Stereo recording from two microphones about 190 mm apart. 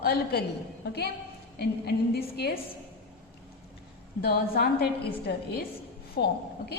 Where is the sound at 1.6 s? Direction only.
60° left (ahead or behind).